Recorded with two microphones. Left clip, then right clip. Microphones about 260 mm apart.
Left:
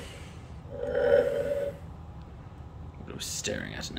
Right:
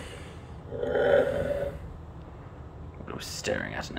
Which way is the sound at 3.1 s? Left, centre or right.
Centre.